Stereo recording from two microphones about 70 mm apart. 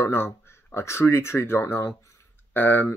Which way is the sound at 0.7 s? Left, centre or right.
Left.